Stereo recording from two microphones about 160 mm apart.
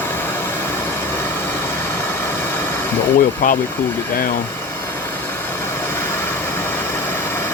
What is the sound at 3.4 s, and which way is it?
Speech, 60° left (ahead or behind).